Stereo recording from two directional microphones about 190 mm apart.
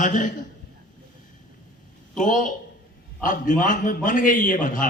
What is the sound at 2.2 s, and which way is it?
A man's voice, 40° left (ahead or behind).